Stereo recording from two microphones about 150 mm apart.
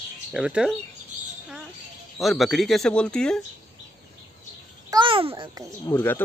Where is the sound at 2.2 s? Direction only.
Centre (ahead or behind).